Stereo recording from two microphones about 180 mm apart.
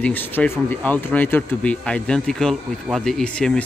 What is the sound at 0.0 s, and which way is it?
A man's voice, 10° left (ahead or behind).